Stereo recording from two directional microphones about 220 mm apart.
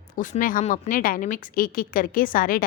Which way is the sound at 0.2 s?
35° left (ahead or behind).